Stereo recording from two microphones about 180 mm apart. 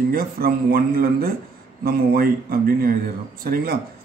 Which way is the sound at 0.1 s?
55° right (ahead or behind).